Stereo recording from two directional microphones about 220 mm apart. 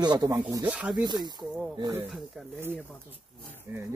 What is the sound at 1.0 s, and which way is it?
Speech, 20° right (ahead or behind).